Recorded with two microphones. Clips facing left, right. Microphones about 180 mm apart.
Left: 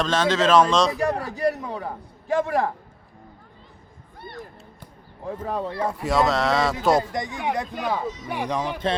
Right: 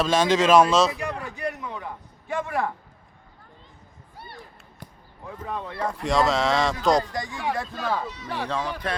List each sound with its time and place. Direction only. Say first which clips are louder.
0.0 s speech: right 1 dB; 10° right (ahead or behind)
0.9 s a man's voice: left 7 dB; 40° left (ahead or behind)
5.2 s a man's voice: left 5 dB; 35° left (ahead or behind)
5.8 s speech: even; 5° left (ahead or behind)
6.9 s speech: left 1 dB; 25° left (ahead or behind)